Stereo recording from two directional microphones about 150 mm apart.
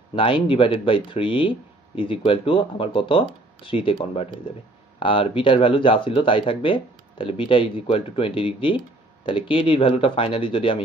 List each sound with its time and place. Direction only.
0.1 s speech: 35° left (ahead or behind)